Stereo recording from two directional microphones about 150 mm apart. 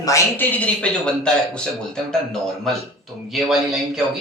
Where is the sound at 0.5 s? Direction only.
10° left (ahead or behind).